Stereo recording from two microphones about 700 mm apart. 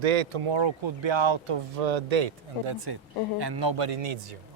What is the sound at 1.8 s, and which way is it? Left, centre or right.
Speech, right.